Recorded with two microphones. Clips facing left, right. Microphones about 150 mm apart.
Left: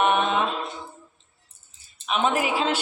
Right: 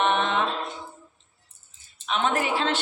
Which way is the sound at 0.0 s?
10° left (ahead or behind).